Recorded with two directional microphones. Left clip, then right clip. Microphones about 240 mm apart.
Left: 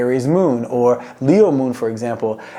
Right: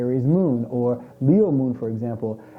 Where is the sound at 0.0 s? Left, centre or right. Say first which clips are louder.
Left 7 dB; centre.